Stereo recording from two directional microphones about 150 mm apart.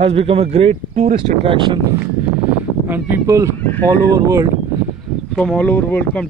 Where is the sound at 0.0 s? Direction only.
40° right (ahead or behind).